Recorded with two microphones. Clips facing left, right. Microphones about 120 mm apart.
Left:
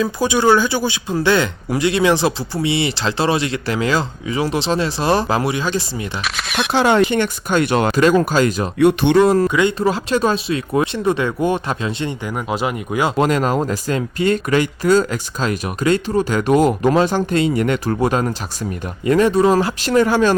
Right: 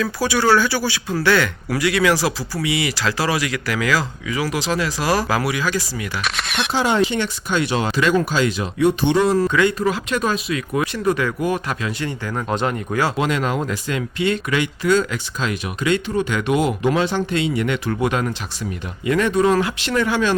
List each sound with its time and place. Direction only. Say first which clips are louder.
0.0 s speech: left 3 dB; 20° left (ahead or behind)
6.2 s speech: left 2 dB; centre (ahead or behind)
6.7 s speech: left 4 dB; 65° left (ahead or behind); by 8.7 s 45° left (ahead or behind)
8.8 s speech: left 4 dB; 60° left (ahead or behind)
9.5 s speech: left 2 dB; 20° left (ahead or behind)
12.3 s speech: right 1 dB; 10° left (ahead or behind)
13.1 s speech: left 4 dB; 40° left (ahead or behind)